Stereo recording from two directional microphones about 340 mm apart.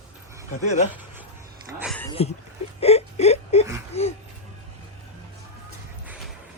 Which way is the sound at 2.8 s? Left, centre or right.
Centre.